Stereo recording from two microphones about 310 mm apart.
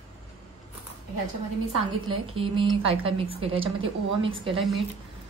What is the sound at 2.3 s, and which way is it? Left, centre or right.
A woman's voice, centre.